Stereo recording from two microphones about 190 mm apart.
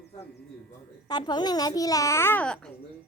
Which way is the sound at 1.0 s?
20° left (ahead or behind).